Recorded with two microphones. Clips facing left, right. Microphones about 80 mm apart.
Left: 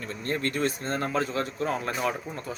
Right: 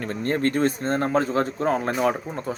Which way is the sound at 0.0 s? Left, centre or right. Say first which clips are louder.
Right 7 dB; right.